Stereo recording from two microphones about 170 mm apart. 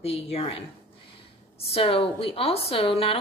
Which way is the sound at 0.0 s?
35° left (ahead or behind).